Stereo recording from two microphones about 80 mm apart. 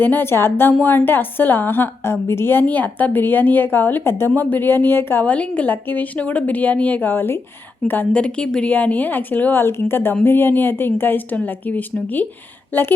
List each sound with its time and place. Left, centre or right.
0.0 s a woman's voice: left
5.2 s a woman's voice: centre